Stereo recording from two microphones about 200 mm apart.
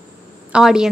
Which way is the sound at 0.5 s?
5° right (ahead or behind).